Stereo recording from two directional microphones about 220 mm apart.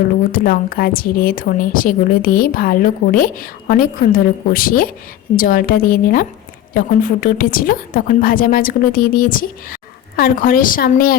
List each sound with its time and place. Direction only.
0.3 s a woman's voice: 40° left (ahead or behind)